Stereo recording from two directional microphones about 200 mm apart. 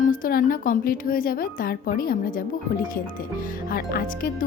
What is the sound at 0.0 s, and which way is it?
A woman's voice, 45° left (ahead or behind).